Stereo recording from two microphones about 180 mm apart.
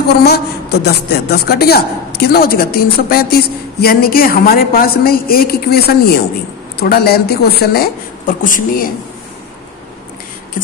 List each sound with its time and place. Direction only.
0.2 s a woman's voice: 65° left (ahead or behind)